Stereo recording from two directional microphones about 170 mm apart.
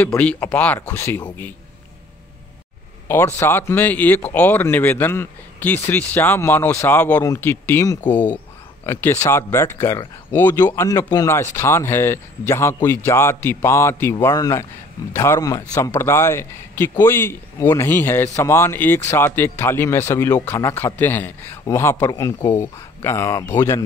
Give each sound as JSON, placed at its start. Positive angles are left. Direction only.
{"t": 0.0, "sound": "a man's voice", "side_deg": 10}
{"t": 3.1, "sound": "a man's voice", "side_deg": 15}